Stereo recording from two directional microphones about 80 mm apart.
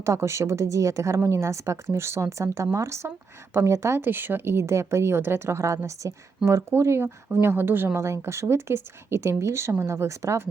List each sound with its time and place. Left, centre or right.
0.0 s a woman's voice: right